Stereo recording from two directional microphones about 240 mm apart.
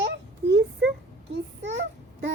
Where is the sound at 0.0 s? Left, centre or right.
Right.